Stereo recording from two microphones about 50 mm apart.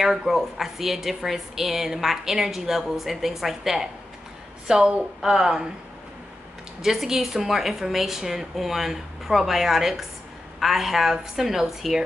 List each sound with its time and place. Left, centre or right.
0.0 s a woman's voice: centre
6.8 s a woman's voice: centre